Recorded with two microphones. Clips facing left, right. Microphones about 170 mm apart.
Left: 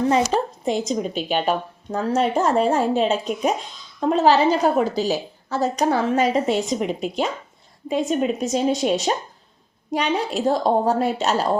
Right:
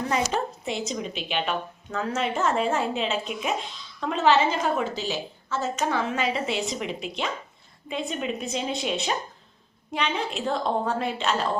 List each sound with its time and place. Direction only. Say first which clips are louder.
0.1 s a woman's voice: left 6 dB; 35° left (ahead or behind)